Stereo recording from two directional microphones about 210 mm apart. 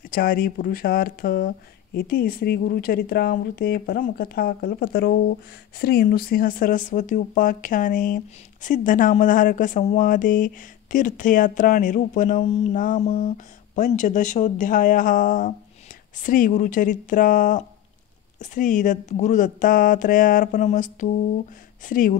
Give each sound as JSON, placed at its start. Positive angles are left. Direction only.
{"t": 0.1, "sound": "speech", "side_deg": 45}